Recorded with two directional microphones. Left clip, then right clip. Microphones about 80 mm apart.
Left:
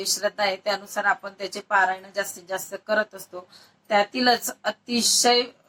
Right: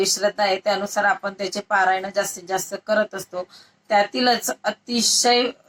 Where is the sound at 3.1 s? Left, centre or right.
Right.